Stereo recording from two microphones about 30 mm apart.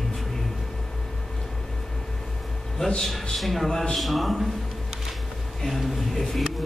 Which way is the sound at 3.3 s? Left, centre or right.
Centre.